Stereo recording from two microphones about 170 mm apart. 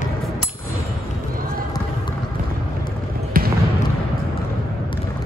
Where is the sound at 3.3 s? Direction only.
60° right (ahead or behind).